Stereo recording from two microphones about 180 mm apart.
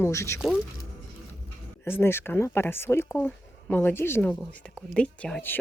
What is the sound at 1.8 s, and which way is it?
A woman's voice, 15° left (ahead or behind).